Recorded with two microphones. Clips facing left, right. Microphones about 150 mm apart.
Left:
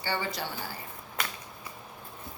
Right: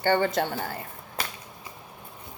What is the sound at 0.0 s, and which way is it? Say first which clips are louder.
Speech: right 10 dB; 55° right (ahead or behind).